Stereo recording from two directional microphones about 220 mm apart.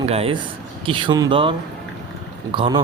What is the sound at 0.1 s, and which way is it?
Speech, 25° right (ahead or behind).